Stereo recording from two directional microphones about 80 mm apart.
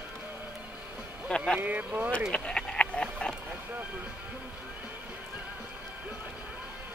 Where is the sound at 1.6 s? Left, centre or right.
Right.